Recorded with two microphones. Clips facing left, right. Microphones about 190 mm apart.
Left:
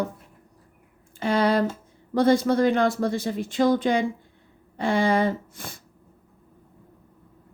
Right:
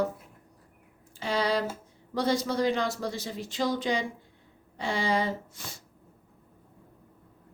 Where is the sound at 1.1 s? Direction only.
55° left (ahead or behind).